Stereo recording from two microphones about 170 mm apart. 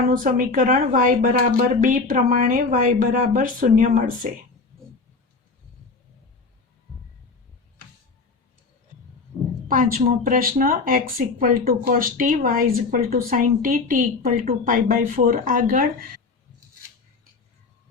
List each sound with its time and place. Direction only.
0.2 s speech: 50° right (ahead or behind)
9.6 s speech: 55° right (ahead or behind)